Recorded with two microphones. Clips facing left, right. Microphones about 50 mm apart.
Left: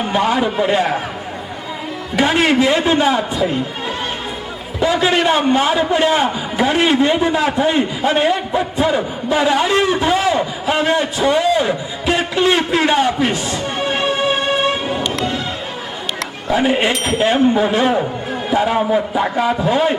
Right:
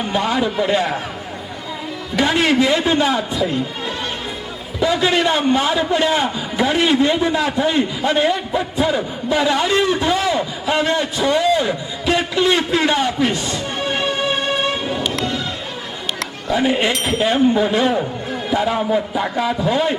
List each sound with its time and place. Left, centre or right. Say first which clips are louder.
0.2 s a man's voice: left 3 dB; centre
2.1 s a man's voice: left 2 dB; centre
4.8 s a man's voice: left 1 dB; centre
10.2 s a man's voice: left 3 dB; centre
13.3 s music: left 2 dB; centre
16.5 s speech: left 2 dB; centre
16.9 s a man's voice: left 2 dB; centre